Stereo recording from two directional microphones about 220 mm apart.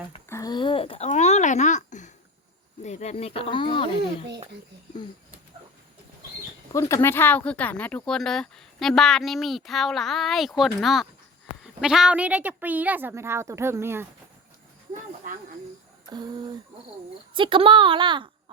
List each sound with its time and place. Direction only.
0.3 s a sound: 15° left (ahead or behind); by 2.0 s 35° left (ahead or behind)
2.8 s speech: 30° left (ahead or behind)
6.7 s a woman's voice: 15° left (ahead or behind); by 14.1 s 10° right (ahead or behind)
16.0 s a woman's voice: 20° right (ahead or behind)